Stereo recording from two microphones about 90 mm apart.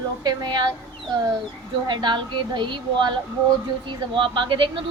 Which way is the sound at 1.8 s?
55° right (ahead or behind).